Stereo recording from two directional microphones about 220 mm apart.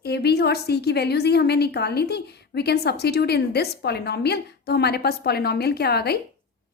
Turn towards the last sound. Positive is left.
turn(degrees=45)  # may be behind; listen again after turning